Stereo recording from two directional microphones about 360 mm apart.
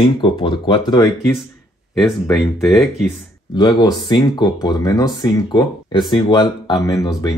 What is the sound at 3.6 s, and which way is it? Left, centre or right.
Speech, centre.